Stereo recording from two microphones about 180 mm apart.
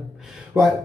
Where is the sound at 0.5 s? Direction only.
10° right (ahead or behind).